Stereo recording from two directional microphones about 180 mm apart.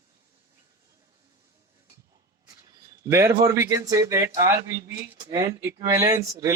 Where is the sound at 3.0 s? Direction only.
15° right (ahead or behind).